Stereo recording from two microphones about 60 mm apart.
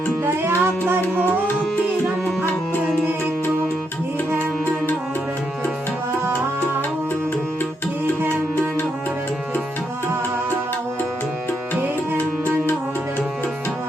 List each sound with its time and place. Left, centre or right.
0.3 s music: right